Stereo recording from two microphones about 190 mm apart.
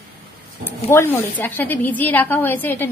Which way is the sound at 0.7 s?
15° left (ahead or behind).